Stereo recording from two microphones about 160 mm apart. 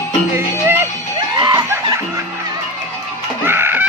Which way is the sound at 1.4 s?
25° right (ahead or behind).